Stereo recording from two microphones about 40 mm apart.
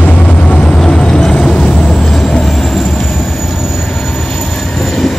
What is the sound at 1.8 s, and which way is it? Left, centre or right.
Vehicle, centre.